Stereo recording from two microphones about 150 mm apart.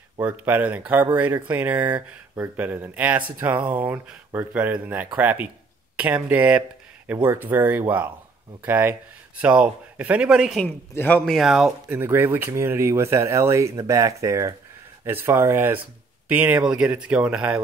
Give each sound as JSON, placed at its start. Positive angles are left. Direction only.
{"t": 0.2, "sound": "speech", "side_deg": -10}
{"t": 10.6, "sound": "speech", "side_deg": 10}
{"t": 11.9, "sound": "speech", "side_deg": -15}